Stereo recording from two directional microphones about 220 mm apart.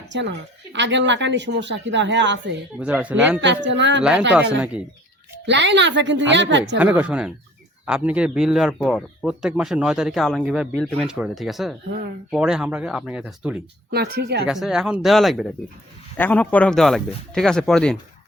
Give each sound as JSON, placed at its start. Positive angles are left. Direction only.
{"t": 0.1, "sound": "speech", "side_deg": -55}
{"t": 2.7, "sound": "speech", "side_deg": -5}
{"t": 3.4, "sound": "speech", "side_deg": -55}
{"t": 5.5, "sound": "speech", "side_deg": -55}
{"t": 6.7, "sound": "speech", "side_deg": -5}
{"t": 13.9, "sound": "speech", "side_deg": -50}
{"t": 14.4, "sound": "speech", "side_deg": 0}